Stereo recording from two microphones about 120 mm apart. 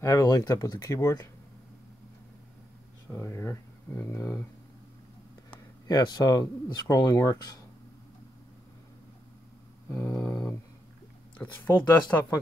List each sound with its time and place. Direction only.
0.0 s speech: 25° left (ahead or behind)
3.1 s speech: 20° left (ahead or behind)
5.9 s speech: 35° left (ahead or behind)
9.8 s speech: 25° left (ahead or behind)
11.3 s speech: 20° left (ahead or behind)